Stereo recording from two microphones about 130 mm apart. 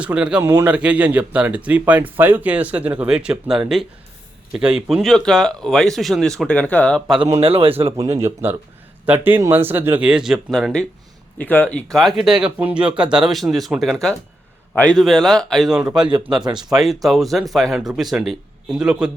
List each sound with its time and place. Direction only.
0.0 s speech: 10° right (ahead or behind); by 7.0 s 10° left (ahead or behind)
7.3 s speech: 50° right (ahead or behind)
7.9 s a man's voice: 25° right (ahead or behind); by 19.1 s 5° right (ahead or behind)